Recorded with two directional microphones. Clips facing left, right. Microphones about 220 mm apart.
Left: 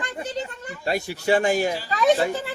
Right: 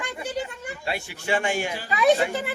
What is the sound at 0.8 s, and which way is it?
Speech, 40° left (ahead or behind).